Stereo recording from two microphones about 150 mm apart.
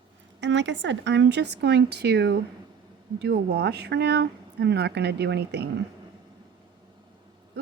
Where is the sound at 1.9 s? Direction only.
90° right.